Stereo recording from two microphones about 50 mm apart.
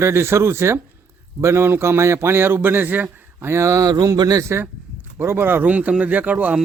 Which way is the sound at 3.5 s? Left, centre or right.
Right.